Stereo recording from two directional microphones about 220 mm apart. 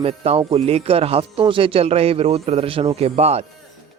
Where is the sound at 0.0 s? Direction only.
25° right (ahead or behind).